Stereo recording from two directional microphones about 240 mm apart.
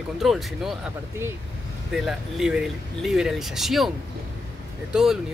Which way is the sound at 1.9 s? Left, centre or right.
Centre.